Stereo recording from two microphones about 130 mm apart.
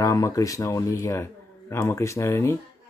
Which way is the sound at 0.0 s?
25° left (ahead or behind).